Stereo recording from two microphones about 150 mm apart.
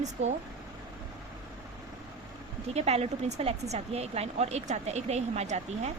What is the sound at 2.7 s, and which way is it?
Speech, 45° right (ahead or behind).